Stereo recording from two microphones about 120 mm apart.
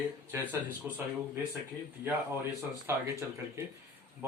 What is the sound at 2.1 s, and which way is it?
Speech, 20° right (ahead or behind).